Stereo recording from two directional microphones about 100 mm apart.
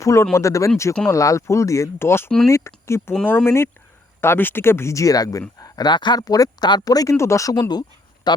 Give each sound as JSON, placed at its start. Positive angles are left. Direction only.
{"t": 0.0, "sound": "speech", "side_deg": 30}